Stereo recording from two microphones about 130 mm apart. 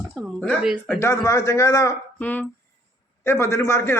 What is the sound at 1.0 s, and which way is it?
Speech, 20° left (ahead or behind).